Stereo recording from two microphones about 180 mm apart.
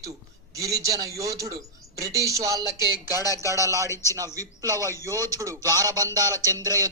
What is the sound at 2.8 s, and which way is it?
Speech, 20° left (ahead or behind).